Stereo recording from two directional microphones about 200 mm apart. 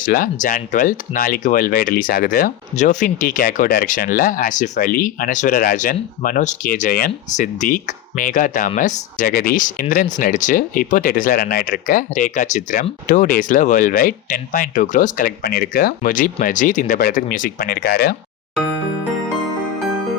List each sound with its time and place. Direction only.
0.0 s speech: 45° left (ahead or behind)